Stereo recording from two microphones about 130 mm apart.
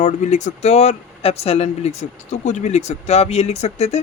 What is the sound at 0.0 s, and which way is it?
Speech, 65° left (ahead or behind).